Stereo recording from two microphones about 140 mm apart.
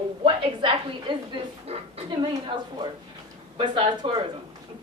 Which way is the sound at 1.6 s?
50° right (ahead or behind).